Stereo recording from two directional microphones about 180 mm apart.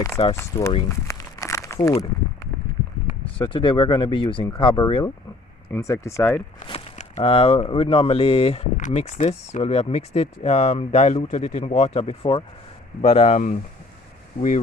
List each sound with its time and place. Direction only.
0.2 s speech: 35° left (ahead or behind)
0.5 s speech: 20° left (ahead or behind)
0.9 s crumpling: 15° left (ahead or behind)
3.3 s speech: 25° left (ahead or behind)
6.7 s speech: 35° left (ahead or behind)